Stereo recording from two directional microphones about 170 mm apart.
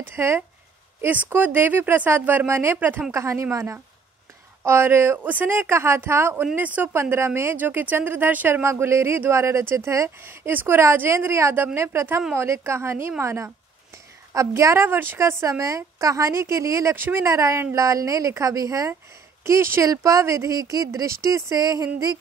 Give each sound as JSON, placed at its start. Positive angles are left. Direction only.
{"t": 0.0, "sound": "speech", "side_deg": -15}